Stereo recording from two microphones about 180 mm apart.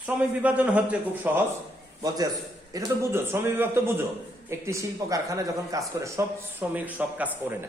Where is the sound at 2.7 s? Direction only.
15° right (ahead or behind).